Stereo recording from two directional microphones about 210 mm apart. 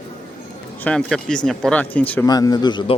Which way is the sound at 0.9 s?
5° left (ahead or behind).